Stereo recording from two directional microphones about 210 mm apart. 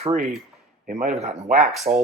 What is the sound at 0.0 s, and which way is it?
Speech, 35° right (ahead or behind).